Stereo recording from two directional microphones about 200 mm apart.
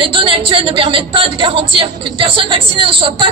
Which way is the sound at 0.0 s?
25° right (ahead or behind).